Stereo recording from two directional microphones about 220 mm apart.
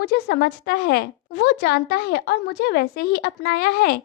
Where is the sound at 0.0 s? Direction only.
50° left (ahead or behind).